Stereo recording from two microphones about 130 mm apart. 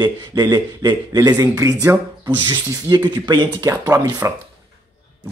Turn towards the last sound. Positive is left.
turn(degrees=-25)  # may be behind; listen again after turning